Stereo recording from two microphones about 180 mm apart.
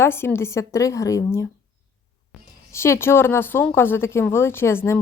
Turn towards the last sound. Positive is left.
turn(degrees=15)  # may be behind; listen again after turning